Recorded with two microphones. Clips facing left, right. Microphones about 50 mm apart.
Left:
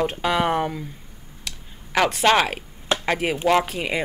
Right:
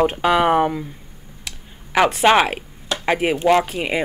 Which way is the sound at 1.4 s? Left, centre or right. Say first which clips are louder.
Right 1 dB; centre.